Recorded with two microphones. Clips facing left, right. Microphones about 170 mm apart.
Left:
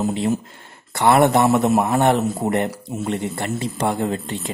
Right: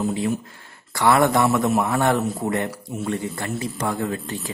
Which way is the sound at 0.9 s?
25° left (ahead or behind).